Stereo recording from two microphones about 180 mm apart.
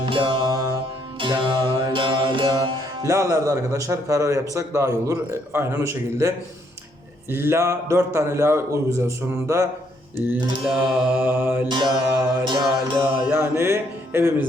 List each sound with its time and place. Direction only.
0.0 s music: 25° right (ahead or behind); by 12.5 s 10° right (ahead or behind)
12.5 s music: 25° right (ahead or behind)
13.0 s music: 10° right (ahead or behind)